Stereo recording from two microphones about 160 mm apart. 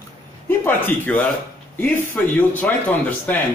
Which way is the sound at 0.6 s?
10° left (ahead or behind).